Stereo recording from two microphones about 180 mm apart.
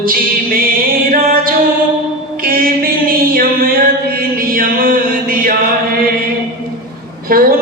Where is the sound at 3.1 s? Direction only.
55° right (ahead or behind).